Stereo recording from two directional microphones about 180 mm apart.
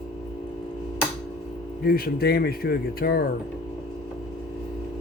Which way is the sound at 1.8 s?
60° left (ahead or behind).